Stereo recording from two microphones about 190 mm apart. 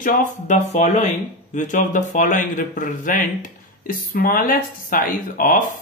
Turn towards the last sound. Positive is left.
turn(degrees=45)  # may be behind; listen again after turning